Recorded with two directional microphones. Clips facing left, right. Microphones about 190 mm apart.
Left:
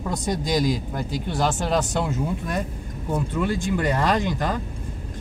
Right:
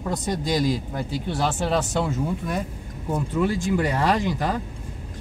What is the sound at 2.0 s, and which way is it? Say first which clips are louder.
Speech: even; 5° right (ahead or behind).